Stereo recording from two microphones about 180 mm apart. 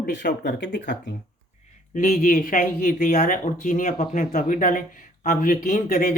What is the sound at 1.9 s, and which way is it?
Speech, 50° left (ahead or behind).